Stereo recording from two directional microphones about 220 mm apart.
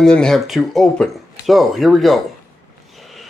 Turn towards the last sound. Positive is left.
turn(degrees=0)  # may be behind; listen again after turning